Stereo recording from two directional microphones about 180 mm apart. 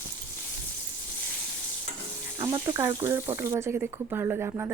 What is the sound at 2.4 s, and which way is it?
Speech, 25° right (ahead or behind).